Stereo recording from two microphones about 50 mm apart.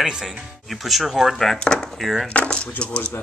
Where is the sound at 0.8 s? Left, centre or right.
Centre.